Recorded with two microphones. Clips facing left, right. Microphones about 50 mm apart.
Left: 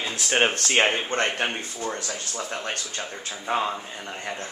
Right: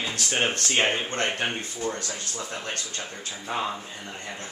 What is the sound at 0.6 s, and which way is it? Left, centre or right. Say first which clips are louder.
Speech: left 3 dB; left.